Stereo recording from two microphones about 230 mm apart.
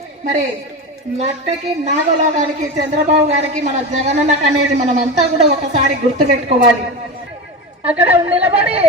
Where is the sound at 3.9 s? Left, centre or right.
Right.